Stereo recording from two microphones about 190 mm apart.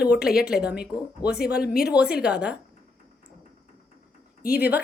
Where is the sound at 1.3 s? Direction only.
55° left (ahead or behind).